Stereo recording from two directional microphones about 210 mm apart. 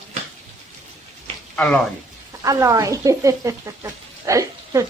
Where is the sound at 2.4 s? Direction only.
15° right (ahead or behind).